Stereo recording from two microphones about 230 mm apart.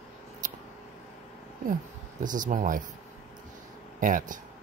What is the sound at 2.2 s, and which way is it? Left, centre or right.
Speech, right.